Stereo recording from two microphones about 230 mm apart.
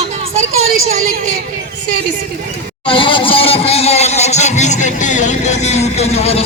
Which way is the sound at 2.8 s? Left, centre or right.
Left.